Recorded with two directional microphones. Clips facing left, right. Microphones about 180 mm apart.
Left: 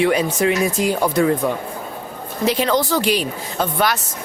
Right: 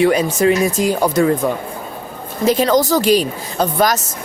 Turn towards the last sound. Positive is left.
turn(degrees=-40)  # may be behind; listen again after turning